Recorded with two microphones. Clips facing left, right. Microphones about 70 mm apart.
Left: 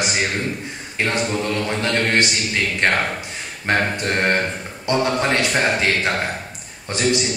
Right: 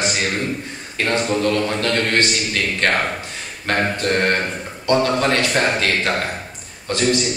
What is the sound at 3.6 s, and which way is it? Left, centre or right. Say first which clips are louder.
A man's voice: right 1 dB; centre.